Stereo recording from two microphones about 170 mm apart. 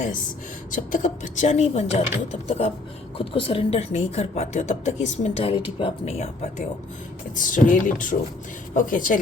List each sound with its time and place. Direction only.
0.8 s speech: 50° left (ahead or behind)
7.3 s speech: 50° left (ahead or behind)